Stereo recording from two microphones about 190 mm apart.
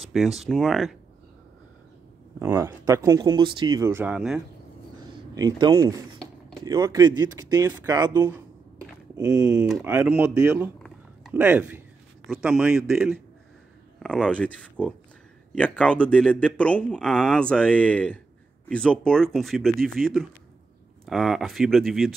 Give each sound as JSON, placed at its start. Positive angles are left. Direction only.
{"t": 0.4, "sound": "speech", "side_deg": 0}
{"t": 2.3, "sound": "speech", "side_deg": -10}
{"t": 5.3, "sound": "speech", "side_deg": -20}
{"t": 9.5, "sound": "speech", "side_deg": -5}
{"t": 10.8, "sound": "a sound", "side_deg": -5}
{"t": 12.3, "sound": "speech", "side_deg": -5}